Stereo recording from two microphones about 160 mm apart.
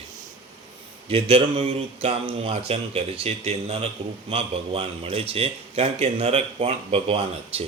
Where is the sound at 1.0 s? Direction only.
35° right (ahead or behind).